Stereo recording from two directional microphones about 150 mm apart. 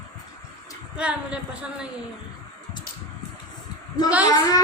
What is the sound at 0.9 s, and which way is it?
Speech, 5° right (ahead or behind).